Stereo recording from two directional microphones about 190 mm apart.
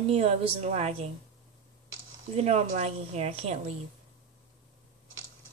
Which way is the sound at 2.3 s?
35° right (ahead or behind).